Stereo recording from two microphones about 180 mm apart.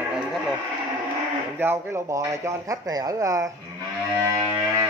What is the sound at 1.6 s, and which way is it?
Speech, 15° right (ahead or behind).